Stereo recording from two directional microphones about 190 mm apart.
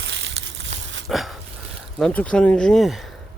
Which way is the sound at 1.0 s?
Centre (ahead or behind).